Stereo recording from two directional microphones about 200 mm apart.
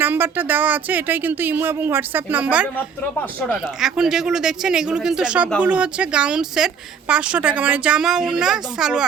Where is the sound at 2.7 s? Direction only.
10° left (ahead or behind).